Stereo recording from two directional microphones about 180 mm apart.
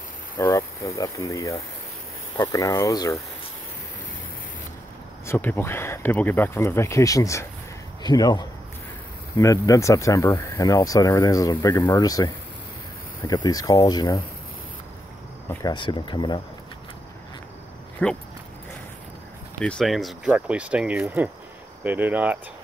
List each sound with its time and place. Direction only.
0.4 s speech: 15° left (ahead or behind)
5.2 s speech: 10° left (ahead or behind)
15.6 s speech: 25° left (ahead or behind)
18.0 s speech: 5° left (ahead or behind)
19.6 s speech: 5° left (ahead or behind)